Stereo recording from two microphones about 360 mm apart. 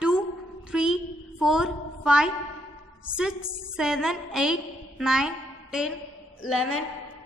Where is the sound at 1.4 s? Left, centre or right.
Centre.